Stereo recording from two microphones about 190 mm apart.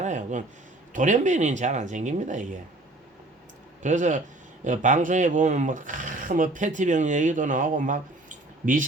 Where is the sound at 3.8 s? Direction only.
40° right (ahead or behind).